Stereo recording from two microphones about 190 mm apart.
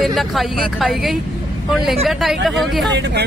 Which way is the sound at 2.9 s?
65° right (ahead or behind).